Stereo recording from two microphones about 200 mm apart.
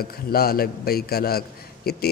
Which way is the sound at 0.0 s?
50° left (ahead or behind).